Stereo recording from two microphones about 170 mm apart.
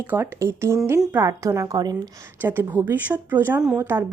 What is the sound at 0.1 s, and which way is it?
Speech, 15° right (ahead or behind).